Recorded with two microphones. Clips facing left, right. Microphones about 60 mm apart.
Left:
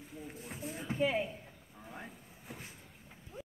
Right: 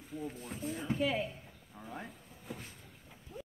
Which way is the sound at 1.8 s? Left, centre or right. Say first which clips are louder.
Right 3 dB; centre.